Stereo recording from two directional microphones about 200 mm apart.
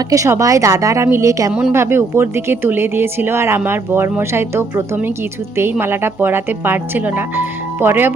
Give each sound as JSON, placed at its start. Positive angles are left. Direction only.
{"t": 0.1, "sound": "a woman's voice", "side_deg": -15}